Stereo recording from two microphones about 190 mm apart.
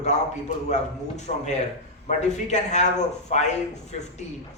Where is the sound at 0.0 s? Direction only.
35° left (ahead or behind).